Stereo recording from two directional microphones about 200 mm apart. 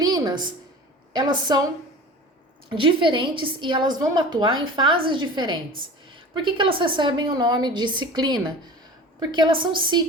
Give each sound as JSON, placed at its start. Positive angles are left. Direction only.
{"t": 0.0, "sound": "a sound", "side_deg": -20}
{"t": 1.1, "sound": "a woman's voice", "side_deg": -20}
{"t": 2.6, "sound": "a woman's voice", "side_deg": -25}